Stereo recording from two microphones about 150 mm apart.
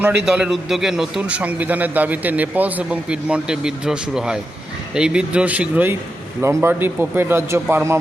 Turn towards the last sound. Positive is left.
turn(degrees=-15)  # may be behind; listen again after turning